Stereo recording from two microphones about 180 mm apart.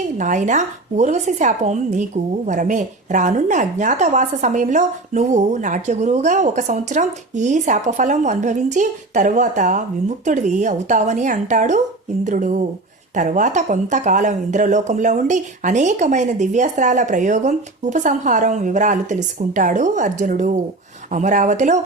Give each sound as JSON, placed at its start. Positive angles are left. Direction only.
{"t": 0.2, "sound": "speech", "side_deg": -45}